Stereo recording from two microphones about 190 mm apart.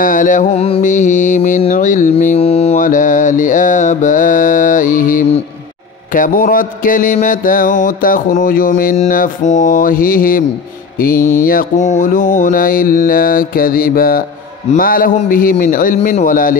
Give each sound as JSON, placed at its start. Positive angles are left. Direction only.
{"t": 0.0, "sound": "mantra", "side_deg": 45}
{"t": 11.1, "sound": "mantra", "side_deg": 15}
{"t": 11.4, "sound": "mantra", "side_deg": 45}